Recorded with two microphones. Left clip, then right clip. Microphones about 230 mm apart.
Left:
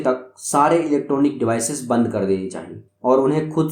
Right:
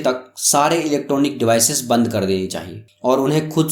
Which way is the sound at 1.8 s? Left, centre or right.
Right.